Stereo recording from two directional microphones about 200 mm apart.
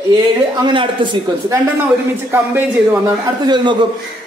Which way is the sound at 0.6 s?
25° right (ahead or behind).